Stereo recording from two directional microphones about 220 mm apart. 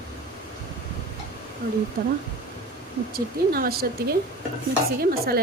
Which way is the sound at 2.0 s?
40° right (ahead or behind).